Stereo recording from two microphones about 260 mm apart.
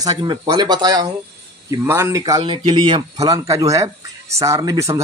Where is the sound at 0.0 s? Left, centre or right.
Centre.